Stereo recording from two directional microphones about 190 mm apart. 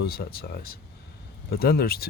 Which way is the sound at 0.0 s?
55° left (ahead or behind).